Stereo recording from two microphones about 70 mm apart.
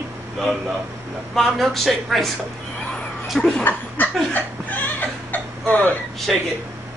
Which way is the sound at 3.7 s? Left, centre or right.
Left.